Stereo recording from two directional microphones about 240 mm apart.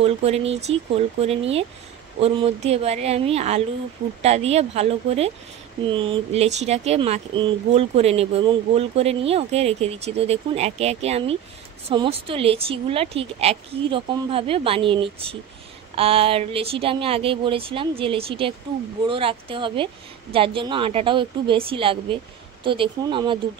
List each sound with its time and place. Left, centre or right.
0.0 s speech: right